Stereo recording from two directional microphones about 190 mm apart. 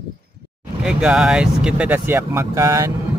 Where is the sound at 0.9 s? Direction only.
5° right (ahead or behind).